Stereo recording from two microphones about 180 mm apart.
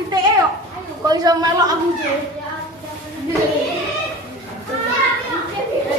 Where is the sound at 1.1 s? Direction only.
20° right (ahead or behind).